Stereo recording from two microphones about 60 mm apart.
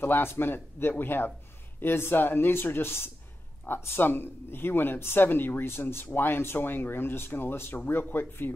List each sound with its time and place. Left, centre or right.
0.0 s speech: left